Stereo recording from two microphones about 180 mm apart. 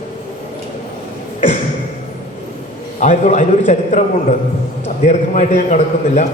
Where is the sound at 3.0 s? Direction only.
40° left (ahead or behind).